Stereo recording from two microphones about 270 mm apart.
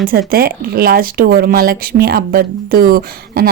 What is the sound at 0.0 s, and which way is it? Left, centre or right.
Speech, right.